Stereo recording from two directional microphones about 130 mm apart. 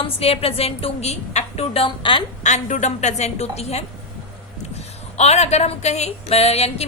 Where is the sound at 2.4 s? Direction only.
65° left (ahead or behind).